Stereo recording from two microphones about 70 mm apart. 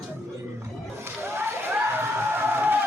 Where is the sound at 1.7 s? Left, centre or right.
Right.